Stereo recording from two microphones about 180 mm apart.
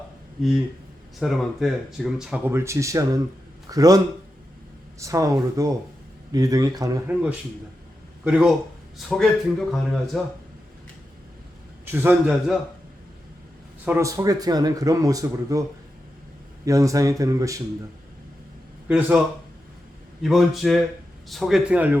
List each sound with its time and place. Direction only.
1.2 s speech: centre (ahead or behind); by 7.2 s 20° right (ahead or behind)
8.2 s speech: 5° right (ahead or behind)
11.9 s speech: 10° right (ahead or behind)
13.8 s speech: 15° right (ahead or behind)
16.6 s speech: 20° right (ahead or behind)
18.9 s speech: 5° right (ahead or behind)
20.2 s speech: centre (ahead or behind)